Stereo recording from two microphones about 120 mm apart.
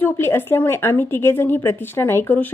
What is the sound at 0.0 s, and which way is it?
Speech, 20° left (ahead or behind).